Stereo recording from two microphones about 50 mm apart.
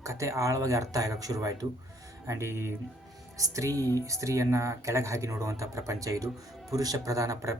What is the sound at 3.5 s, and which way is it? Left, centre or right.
A man's voice, right.